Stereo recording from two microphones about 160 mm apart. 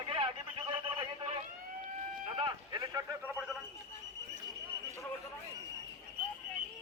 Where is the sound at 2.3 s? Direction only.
25° right (ahead or behind).